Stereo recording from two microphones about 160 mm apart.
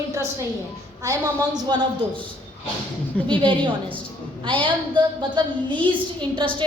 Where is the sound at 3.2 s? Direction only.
30° right (ahead or behind).